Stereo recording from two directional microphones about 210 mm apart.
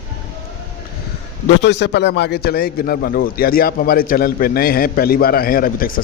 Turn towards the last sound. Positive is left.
turn(degrees=40)  # may be behind; listen again after turning